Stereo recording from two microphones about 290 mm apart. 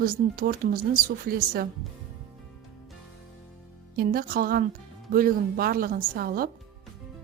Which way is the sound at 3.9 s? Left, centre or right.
Right.